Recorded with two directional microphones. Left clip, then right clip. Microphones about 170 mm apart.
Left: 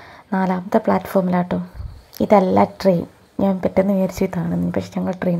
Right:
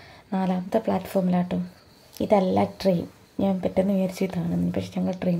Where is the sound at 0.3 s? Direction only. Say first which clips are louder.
Left 6 dB; 20° left (ahead or behind).